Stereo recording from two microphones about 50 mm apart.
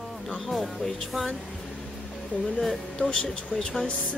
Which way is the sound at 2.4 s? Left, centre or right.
Centre.